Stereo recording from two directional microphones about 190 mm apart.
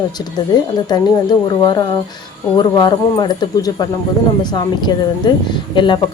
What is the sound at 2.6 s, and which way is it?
Speech, 20° left (ahead or behind).